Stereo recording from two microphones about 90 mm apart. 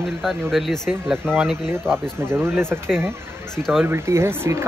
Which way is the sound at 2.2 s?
25° right (ahead or behind).